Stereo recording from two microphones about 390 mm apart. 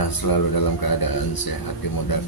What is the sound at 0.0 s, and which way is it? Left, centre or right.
Speech, left.